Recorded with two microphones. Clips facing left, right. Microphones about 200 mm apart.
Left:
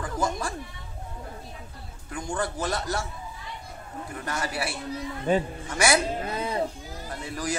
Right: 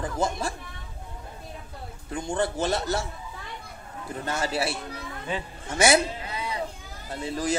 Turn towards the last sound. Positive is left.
turn(degrees=-25)  # may be behind; listen again after turning